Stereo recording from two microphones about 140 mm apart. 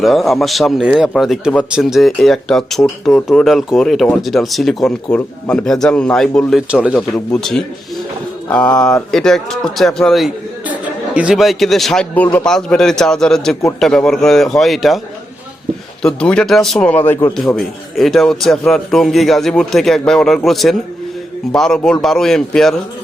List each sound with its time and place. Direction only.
0.0 s a man's voice: centre (ahead or behind)
6.7 s speech: 5° right (ahead or behind)
8.6 s speech: 25° left (ahead or behind)
9.0 s a man's voice: 5° left (ahead or behind)
16.0 s speech: 5° left (ahead or behind)
17.3 s a man's voice: centre (ahead or behind)